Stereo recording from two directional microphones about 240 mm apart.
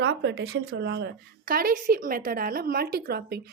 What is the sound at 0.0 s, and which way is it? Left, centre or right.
Speech, right.